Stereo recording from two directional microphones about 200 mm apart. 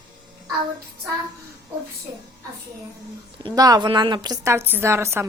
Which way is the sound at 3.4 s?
20° right (ahead or behind).